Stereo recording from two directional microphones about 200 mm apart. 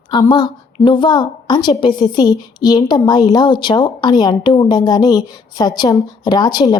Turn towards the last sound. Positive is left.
turn(degrees=20)  # may be behind; listen again after turning